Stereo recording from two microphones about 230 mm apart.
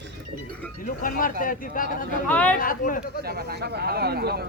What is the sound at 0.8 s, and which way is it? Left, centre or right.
Speech, left.